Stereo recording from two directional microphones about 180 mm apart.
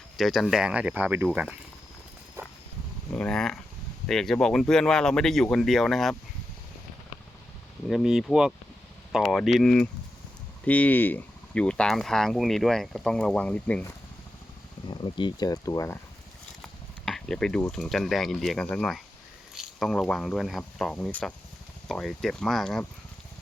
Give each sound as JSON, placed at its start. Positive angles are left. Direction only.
{"t": 0.2, "sound": "speech", "side_deg": 0}
{"t": 3.1, "sound": "speech", "side_deg": 5}
{"t": 7.9, "sound": "speech", "side_deg": 0}
{"t": 14.8, "sound": "speech", "side_deg": 25}
{"t": 17.1, "sound": "speech", "side_deg": 0}